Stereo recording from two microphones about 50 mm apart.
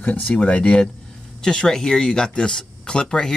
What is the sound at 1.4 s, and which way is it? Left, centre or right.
Speech, centre.